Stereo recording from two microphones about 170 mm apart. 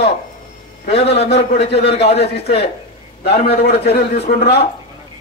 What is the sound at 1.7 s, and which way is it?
Speech, 75° left (ahead or behind).